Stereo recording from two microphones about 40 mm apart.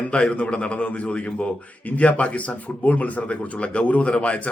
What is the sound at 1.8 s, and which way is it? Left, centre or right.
Speech, left.